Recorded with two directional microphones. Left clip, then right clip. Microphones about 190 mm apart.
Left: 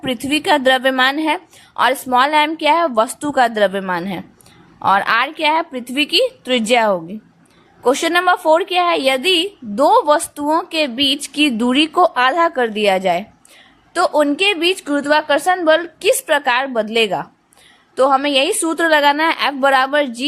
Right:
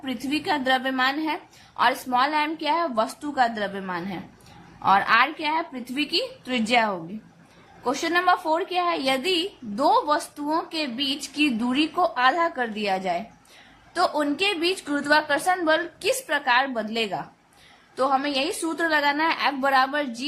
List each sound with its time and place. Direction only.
0.0 s a woman's voice: 40° left (ahead or behind)